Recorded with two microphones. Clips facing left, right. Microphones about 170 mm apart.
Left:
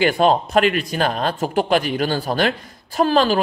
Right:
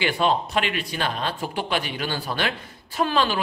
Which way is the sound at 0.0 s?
45° left (ahead or behind).